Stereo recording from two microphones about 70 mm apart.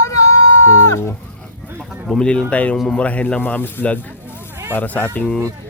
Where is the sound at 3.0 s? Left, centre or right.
Centre.